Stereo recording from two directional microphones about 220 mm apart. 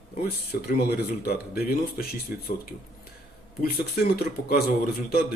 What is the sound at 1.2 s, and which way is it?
Speech, 45° left (ahead or behind).